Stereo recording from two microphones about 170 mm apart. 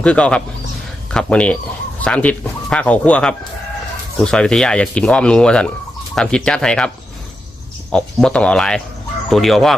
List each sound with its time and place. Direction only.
0.0 s speech: 5° left (ahead or behind)
7.9 s speech: 5° left (ahead or behind)